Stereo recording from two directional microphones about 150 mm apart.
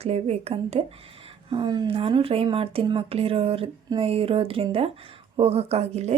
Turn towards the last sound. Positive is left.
turn(degrees=-45)  # may be behind; listen again after turning